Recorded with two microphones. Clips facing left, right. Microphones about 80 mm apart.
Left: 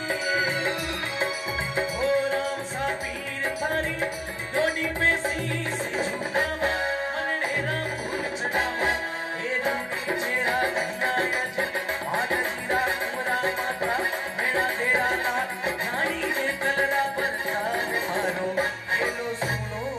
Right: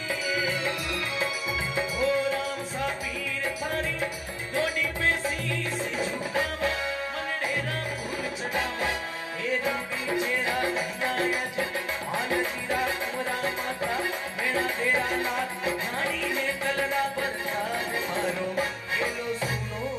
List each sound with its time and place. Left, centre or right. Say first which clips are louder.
0.1 s music: left 3 dB; left
1.8 s music: left 2 dB; left
9.5 s music: left 1 dB; left